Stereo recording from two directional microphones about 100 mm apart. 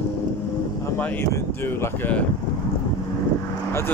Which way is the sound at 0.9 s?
25° left (ahead or behind).